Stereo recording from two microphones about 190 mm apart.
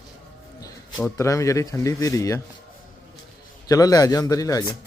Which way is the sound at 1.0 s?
15° left (ahead or behind).